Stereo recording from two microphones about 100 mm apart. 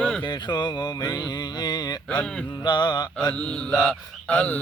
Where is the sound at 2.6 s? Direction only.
45° left (ahead or behind).